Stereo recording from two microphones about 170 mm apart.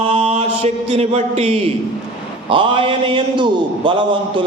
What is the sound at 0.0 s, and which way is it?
Mantra, 35° right (ahead or behind).